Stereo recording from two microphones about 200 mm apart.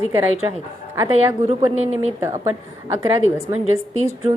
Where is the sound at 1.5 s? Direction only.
35° right (ahead or behind).